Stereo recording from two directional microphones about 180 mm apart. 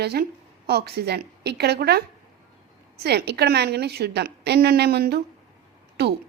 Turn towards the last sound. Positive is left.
turn(degrees=-65)  # may be behind; listen again after turning